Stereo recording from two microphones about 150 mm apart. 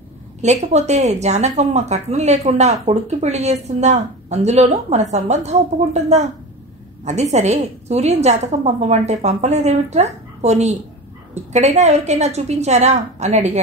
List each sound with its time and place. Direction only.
0.4 s speech: 50° right (ahead or behind)